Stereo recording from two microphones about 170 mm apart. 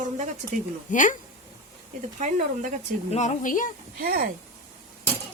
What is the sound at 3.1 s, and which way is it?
Speech, 45° left (ahead or behind).